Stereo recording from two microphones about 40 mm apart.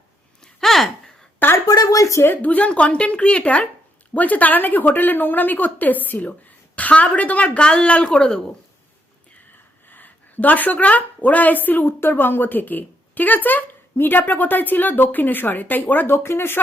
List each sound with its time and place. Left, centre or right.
0.6 s a sound: centre
1.4 s a sound: left
2.4 s a woman's voice: left
9.9 s a woman's voice: left
13.9 s a woman's voice: left
16.1 s speech: left